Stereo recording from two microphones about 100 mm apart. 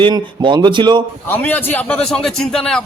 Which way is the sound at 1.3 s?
20° left (ahead or behind).